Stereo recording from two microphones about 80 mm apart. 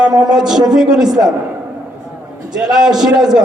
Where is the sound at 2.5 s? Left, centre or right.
Centre.